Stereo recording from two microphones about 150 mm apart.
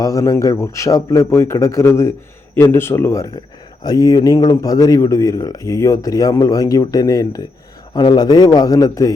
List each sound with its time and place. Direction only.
0.0 s speech: 20° left (ahead or behind)